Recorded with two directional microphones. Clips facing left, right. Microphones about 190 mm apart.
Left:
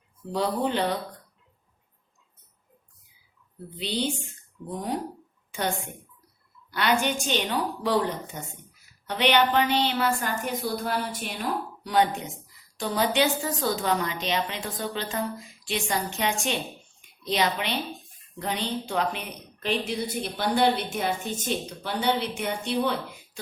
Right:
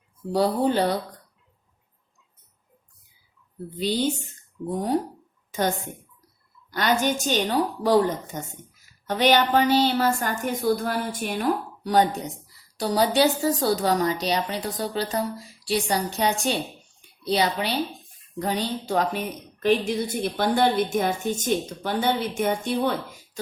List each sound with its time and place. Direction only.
0.3 s a woman's voice: 40° right (ahead or behind)
3.8 s a woman's voice: 40° right (ahead or behind)
5.5 s a sound: 40° right (ahead or behind)
6.7 s a woman's voice: 40° right (ahead or behind)